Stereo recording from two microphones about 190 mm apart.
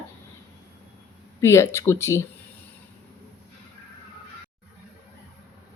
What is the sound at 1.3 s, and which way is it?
Speech, 15° left (ahead or behind).